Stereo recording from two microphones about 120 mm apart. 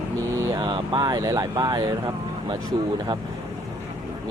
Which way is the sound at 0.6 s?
45° right (ahead or behind).